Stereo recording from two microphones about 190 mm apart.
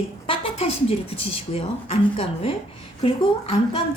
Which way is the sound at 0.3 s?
30° left (ahead or behind).